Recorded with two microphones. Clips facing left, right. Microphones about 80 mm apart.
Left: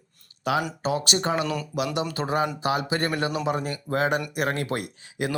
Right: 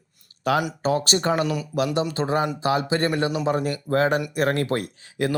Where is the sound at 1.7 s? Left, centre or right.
Right.